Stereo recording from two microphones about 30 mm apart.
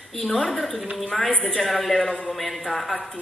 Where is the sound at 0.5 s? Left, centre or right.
Centre.